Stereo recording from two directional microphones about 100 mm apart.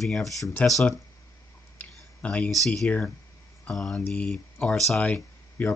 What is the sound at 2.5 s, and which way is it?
Speech, 5° left (ahead or behind).